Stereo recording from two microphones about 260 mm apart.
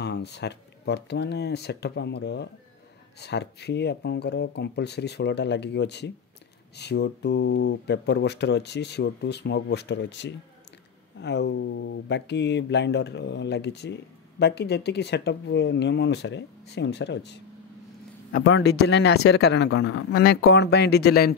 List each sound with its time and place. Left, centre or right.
0.0 s speech: left